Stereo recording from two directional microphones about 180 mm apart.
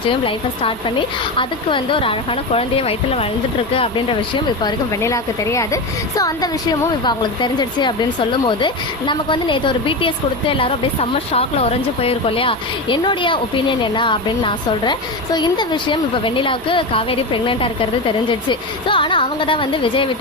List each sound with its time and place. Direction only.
0.1 s a woman's voice: 30° left (ahead or behind)